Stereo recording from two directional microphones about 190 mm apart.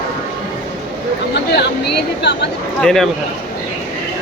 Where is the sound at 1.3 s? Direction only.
60° left (ahead or behind).